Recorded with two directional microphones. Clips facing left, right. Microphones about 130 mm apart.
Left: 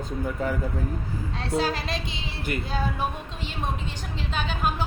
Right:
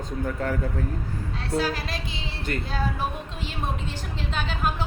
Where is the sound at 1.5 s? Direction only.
25° left (ahead or behind).